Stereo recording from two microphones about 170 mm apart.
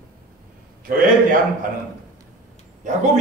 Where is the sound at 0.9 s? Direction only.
60° right (ahead or behind).